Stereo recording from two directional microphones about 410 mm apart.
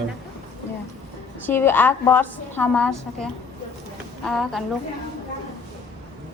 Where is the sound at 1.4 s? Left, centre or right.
Centre.